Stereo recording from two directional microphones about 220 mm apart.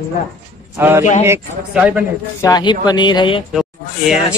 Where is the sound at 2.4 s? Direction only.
15° left (ahead or behind).